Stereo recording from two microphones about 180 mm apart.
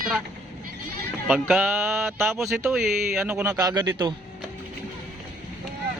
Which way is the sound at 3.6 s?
20° right (ahead or behind).